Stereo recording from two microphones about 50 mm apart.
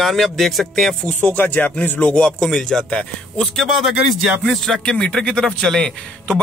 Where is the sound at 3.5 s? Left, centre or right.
Centre.